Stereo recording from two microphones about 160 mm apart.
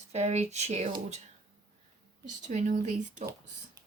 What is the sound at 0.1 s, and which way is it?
Speech, 45° right (ahead or behind).